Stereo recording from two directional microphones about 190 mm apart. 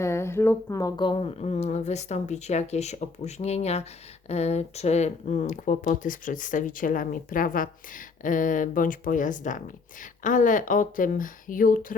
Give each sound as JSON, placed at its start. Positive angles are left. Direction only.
{"t": 0.0, "sound": "speech", "side_deg": 15}